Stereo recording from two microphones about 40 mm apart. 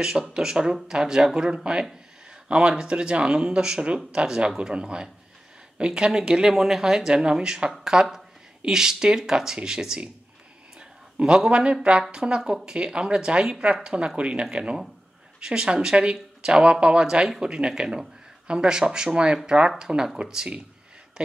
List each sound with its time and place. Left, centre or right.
0.0 s speech: centre